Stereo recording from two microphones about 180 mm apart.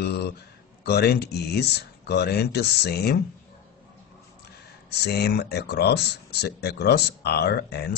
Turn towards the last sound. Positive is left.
turn(degrees=65)  # may be behind; listen again after turning